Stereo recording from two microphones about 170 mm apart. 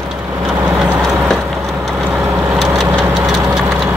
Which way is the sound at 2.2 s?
15° right (ahead or behind).